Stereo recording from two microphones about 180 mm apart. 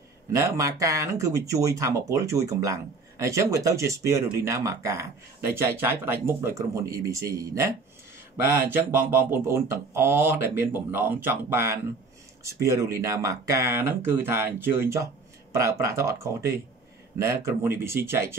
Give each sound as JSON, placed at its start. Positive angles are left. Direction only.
{"t": 0.3, "sound": "speech", "side_deg": -15}